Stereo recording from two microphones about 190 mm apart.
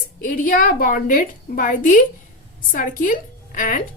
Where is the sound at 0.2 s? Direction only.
45° left (ahead or behind).